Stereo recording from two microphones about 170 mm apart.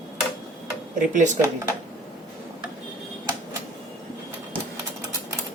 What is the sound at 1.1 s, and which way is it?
Speech, 45° right (ahead or behind).